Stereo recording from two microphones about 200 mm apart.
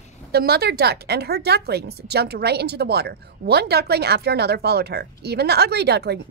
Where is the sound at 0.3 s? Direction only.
50° right (ahead or behind).